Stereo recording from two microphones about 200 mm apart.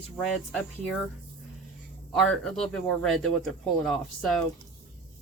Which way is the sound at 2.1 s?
Centre (ahead or behind).